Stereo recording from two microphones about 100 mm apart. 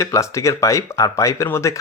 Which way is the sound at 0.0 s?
30° left (ahead or behind).